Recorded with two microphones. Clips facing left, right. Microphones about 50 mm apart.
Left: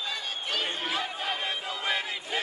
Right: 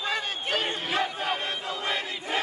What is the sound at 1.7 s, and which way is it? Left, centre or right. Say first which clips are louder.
Choir: even; left.